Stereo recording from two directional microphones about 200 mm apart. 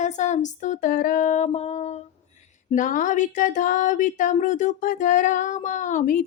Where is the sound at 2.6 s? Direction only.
40° left (ahead or behind).